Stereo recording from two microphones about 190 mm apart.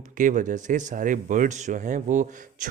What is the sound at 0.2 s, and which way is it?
A man's voice, 45° right (ahead or behind).